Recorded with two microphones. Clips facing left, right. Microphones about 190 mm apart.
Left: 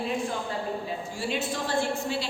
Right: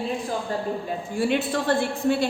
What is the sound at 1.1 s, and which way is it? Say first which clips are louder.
A woman's voice: right 8 dB; 60° right (ahead or behind).